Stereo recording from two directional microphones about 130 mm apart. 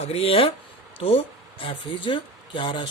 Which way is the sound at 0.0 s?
50° left (ahead or behind).